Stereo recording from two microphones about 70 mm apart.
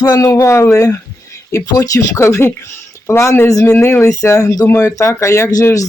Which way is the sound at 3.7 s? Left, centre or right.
Left.